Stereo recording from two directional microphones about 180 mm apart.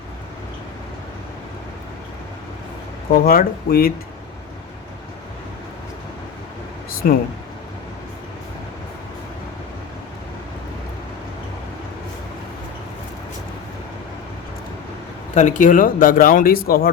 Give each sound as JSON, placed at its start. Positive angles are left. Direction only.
{"t": 3.1, "sound": "speech", "side_deg": 55}
{"t": 7.0, "sound": "speech", "side_deg": 55}
{"t": 15.4, "sound": "speech", "side_deg": 45}